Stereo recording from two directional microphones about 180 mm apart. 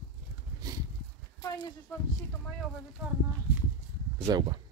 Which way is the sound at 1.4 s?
20° left (ahead or behind).